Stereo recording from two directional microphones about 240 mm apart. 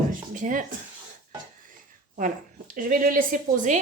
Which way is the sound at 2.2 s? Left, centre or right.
Right.